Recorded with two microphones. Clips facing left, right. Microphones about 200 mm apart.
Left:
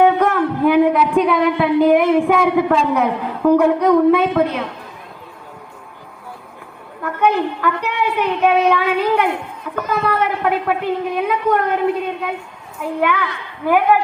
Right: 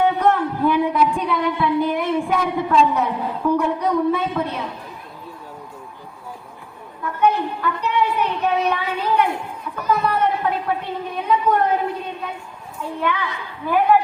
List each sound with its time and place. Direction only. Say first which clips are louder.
0.0 s a sound: left 4 dB; 90° left
7.0 s a woman's voice: left 2 dB; 90° left
12.8 s a woman's voice: left 5 dB; 90° left